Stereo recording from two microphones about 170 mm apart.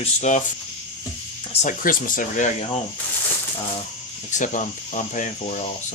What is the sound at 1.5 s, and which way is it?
Music, 40° left (ahead or behind).